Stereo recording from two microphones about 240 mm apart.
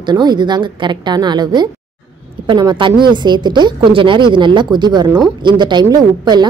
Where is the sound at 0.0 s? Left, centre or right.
Centre.